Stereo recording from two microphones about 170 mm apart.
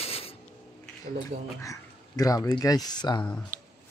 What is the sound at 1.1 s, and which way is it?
Speech, 60° right (ahead or behind).